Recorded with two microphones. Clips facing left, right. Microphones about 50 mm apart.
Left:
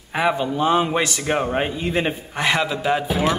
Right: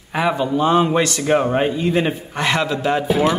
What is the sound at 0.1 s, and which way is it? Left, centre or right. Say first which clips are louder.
Speech: right 2 dB; centre.